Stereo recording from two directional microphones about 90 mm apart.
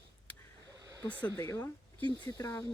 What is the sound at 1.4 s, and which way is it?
Speech, 30° left (ahead or behind).